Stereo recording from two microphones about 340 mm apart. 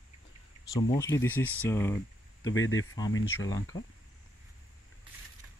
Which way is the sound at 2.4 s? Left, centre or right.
Left.